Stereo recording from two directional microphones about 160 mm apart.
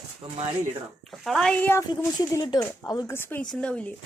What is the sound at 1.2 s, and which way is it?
Speech, centre (ahead or behind).